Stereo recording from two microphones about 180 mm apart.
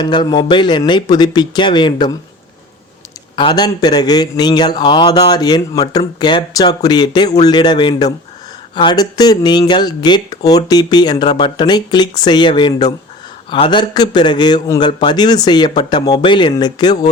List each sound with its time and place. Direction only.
0.0 s speech: 25° left (ahead or behind)
3.3 s speech: 25° left (ahead or behind)